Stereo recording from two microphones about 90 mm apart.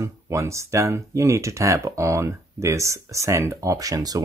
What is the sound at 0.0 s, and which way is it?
Speech, 35° right (ahead or behind).